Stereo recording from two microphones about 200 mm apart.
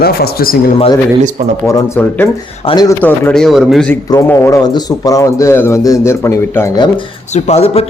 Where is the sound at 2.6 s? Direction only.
20° left (ahead or behind).